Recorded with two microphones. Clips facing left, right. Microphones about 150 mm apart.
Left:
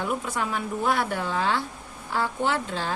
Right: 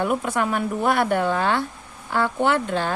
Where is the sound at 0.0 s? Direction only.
60° right (ahead or behind).